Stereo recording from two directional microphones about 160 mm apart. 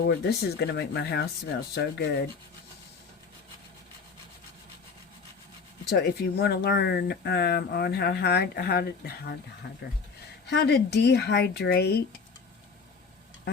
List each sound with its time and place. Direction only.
0.0 s speech: 85° left
5.9 s speech: 80° left
9.6 s speech: 90° left